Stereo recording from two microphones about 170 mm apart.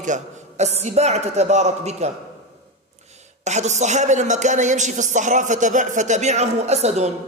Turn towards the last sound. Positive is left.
turn(degrees=-40)  # may be behind; listen again after turning